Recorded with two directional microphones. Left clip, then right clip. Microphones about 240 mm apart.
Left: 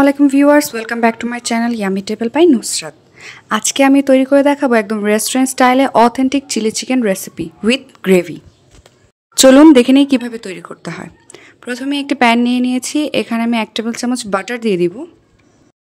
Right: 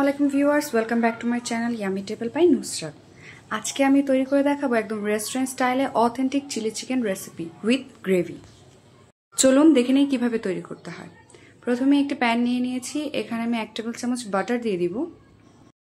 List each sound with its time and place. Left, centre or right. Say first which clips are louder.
0.0 s speech: left 11 dB; left